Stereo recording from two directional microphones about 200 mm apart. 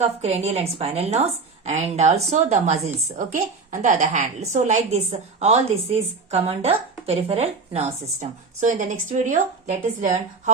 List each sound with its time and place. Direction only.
0.0 s a woman's voice: 30° right (ahead or behind)